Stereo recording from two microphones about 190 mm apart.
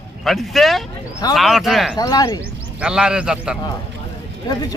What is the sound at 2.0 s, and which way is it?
Speech, 20° left (ahead or behind).